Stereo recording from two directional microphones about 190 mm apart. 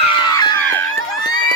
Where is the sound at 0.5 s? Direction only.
10° left (ahead or behind).